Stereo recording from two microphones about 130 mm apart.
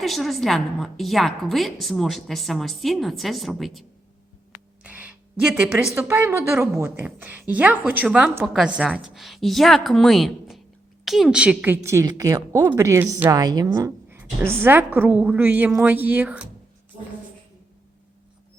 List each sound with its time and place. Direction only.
0.0 s a woman's voice: centre (ahead or behind)
4.8 s a sound: 10° right (ahead or behind)
5.9 s a woman's voice: 20° right (ahead or behind)
13.3 s a woman's voice: 30° right (ahead or behind); by 16.5 s 10° right (ahead or behind)